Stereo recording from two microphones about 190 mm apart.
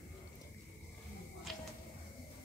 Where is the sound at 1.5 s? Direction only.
Centre (ahead or behind).